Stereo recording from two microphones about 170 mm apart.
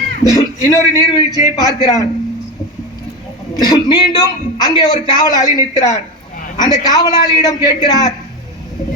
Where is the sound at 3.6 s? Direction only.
25° left (ahead or behind).